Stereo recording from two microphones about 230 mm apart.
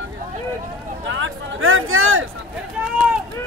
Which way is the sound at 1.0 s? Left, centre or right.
Right.